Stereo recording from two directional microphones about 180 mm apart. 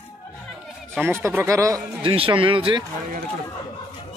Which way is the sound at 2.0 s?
30° right (ahead or behind).